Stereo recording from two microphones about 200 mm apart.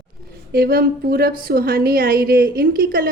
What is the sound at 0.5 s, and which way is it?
A woman's voice, 50° right (ahead or behind).